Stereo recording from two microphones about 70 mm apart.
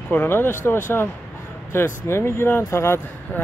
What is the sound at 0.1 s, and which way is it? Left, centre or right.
Speech, left.